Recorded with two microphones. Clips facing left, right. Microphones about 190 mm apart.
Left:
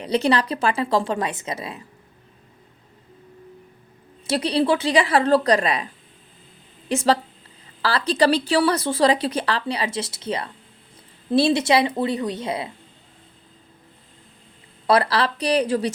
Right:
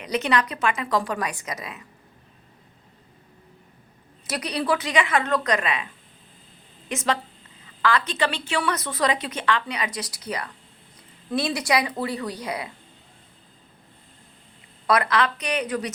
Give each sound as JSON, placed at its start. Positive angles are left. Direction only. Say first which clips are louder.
{"t": 0.0, "sound": "speech", "louder": "left 4 dB", "side_deg": 30}
{"t": 4.3, "sound": "a woman's voice", "louder": "left 5 dB", "side_deg": 30}
{"t": 14.8, "sound": "speech", "louder": "left 3 dB", "side_deg": 30}